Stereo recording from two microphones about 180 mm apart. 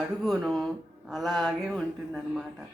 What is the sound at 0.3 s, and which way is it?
Speech, centre (ahead or behind).